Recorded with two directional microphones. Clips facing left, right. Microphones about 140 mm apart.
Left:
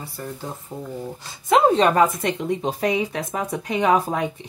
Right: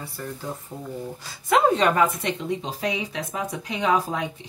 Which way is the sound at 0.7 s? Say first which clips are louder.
Left 3 dB; 20° left (ahead or behind).